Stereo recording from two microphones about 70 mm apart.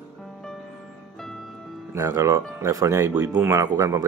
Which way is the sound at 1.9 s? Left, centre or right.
Right.